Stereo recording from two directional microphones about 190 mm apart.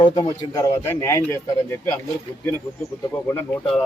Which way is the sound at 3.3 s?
5° left (ahead or behind).